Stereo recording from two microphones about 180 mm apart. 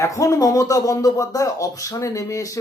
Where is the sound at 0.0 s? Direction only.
20° left (ahead or behind).